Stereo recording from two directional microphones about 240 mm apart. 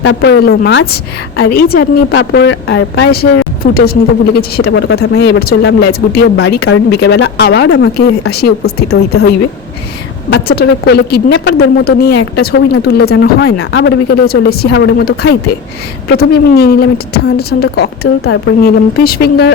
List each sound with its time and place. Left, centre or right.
0.0 s a woman's voice: left